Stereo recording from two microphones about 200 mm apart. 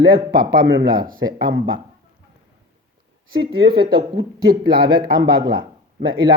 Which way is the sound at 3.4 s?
25° right (ahead or behind).